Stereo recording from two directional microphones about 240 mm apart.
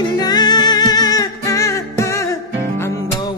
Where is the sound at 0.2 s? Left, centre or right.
Centre.